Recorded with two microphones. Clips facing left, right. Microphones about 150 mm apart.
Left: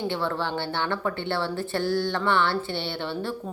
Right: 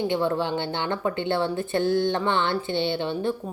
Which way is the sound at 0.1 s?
15° right (ahead or behind).